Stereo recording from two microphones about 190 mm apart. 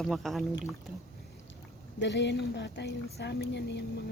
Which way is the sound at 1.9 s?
65° left (ahead or behind).